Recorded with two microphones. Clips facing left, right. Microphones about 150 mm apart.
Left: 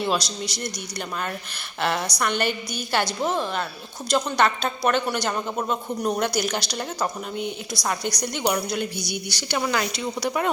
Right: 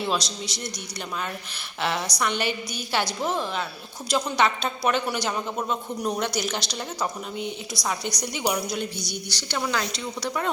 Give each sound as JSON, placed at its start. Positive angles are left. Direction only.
{"t": 0.0, "sound": "speech", "side_deg": 0}
{"t": 5.5, "sound": "speech", "side_deg": 10}
{"t": 8.8, "sound": "speech", "side_deg": 5}